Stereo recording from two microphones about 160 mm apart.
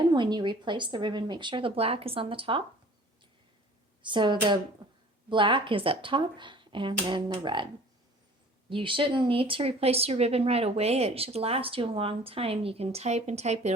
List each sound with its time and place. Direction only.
0.1 s speech: 30° right (ahead or behind)
4.0 s speech: 30° right (ahead or behind)
8.7 s speech: 35° right (ahead or behind)